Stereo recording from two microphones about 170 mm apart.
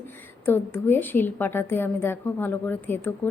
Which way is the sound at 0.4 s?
10° left (ahead or behind).